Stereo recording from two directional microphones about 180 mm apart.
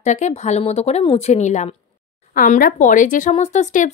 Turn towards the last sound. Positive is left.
turn(degrees=40)  # may be behind; listen again after turning